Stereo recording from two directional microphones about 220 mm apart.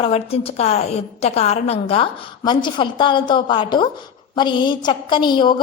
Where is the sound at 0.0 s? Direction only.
25° left (ahead or behind).